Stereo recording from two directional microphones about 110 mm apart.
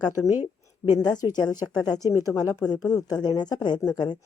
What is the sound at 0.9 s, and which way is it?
A woman's voice, 35° left (ahead or behind).